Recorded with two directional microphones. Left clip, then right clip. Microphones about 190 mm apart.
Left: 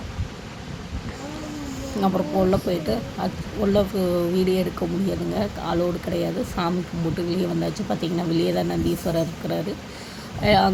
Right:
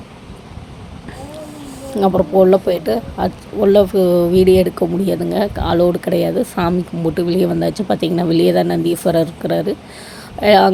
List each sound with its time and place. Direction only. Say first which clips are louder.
2.0 s speech: right 10 dB; 30° right (ahead or behind)